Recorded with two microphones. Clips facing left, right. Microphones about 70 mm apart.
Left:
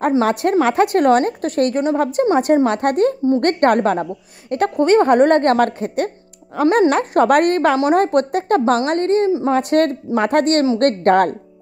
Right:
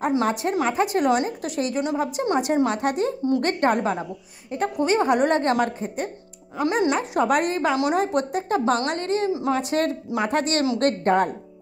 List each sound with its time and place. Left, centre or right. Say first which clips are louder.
0.2 s a woman's voice: left 7 dB; left
6.6 s a woman's voice: left 8 dB; left
7.7 s a woman's voice: left 7 dB; left
8.0 s a woman's voice: left 7 dB; left
8.8 s a woman's voice: left 8 dB; left
9.5 s a woman's voice: left 7 dB; left